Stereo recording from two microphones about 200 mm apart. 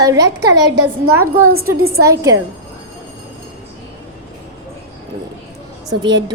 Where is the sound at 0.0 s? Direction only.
15° right (ahead or behind).